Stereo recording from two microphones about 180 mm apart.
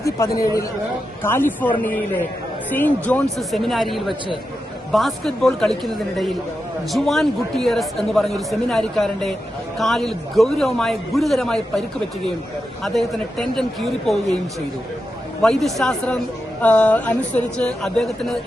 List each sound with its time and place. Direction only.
0.0 s a man's voice: 20° left (ahead or behind)
2.7 s a man's voice: 10° left (ahead or behind)
12.8 s a man's voice: centre (ahead or behind)
15.4 s a man's voice: centre (ahead or behind)